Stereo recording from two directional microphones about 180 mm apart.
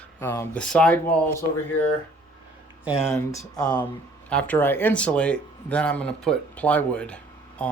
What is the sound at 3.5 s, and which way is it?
Speech, 20° left (ahead or behind).